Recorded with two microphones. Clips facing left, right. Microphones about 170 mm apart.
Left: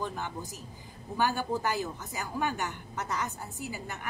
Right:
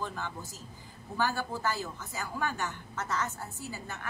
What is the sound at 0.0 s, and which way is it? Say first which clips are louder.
A man's voice: left 2 dB; 15° left (ahead or behind).